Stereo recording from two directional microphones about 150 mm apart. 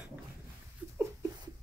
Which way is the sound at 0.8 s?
15° right (ahead or behind).